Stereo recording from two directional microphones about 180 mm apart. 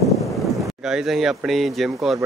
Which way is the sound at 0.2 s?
Centre (ahead or behind).